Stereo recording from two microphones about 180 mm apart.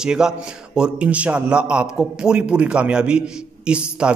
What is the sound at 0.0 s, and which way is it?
A man's voice, 5° right (ahead or behind).